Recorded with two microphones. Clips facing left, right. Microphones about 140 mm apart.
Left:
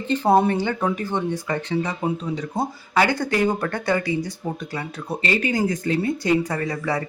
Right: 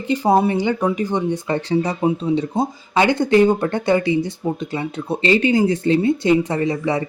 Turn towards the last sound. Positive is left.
turn(degrees=-20)  # may be behind; listen again after turning